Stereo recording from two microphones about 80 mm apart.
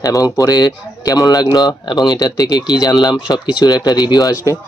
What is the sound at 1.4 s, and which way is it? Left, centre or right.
Speech, left.